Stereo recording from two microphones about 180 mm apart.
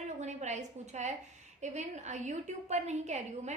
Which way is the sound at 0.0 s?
40° right (ahead or behind).